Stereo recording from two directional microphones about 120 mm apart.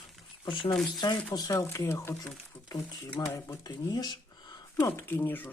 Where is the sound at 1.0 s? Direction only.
35° left (ahead or behind).